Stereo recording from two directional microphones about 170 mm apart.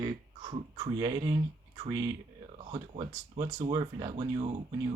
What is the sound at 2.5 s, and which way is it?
Speech, 35° right (ahead or behind).